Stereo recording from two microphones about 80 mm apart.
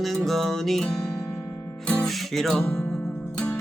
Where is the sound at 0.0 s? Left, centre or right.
Centre.